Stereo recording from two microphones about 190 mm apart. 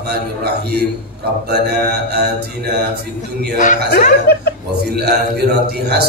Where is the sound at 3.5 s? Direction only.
40° left (ahead or behind).